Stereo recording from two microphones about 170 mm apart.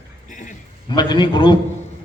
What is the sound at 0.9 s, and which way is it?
Speech, 25° left (ahead or behind).